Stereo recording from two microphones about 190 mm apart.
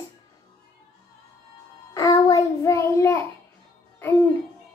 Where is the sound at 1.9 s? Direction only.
20° left (ahead or behind).